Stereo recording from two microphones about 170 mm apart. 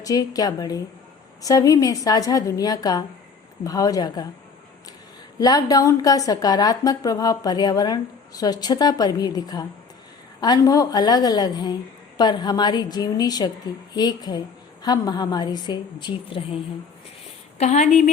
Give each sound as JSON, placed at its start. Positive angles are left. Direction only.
{"t": 0.0, "sound": "a woman's voice", "side_deg": 20}
{"t": 5.4, "sound": "a woman's voice", "side_deg": 20}
{"t": 17.6, "sound": "speech", "side_deg": 45}